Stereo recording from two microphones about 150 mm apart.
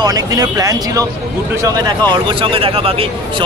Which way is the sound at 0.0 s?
25° right (ahead or behind).